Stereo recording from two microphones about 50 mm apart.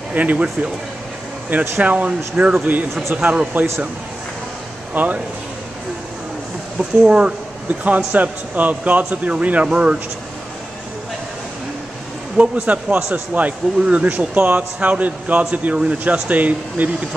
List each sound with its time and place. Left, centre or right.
0.1 s speech: right
1.8 s speech: right
4.9 s a man's voice: right
6.8 s speech: right
7.8 s a man's voice: right
12.6 s speech: right